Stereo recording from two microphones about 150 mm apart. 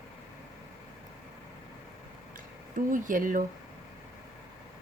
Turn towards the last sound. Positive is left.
turn(degrees=-60)  # may be behind; listen again after turning